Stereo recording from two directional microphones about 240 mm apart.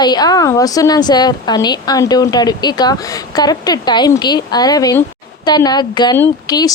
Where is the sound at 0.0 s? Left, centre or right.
Centre.